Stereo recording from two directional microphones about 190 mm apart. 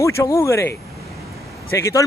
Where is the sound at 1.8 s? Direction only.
15° left (ahead or behind).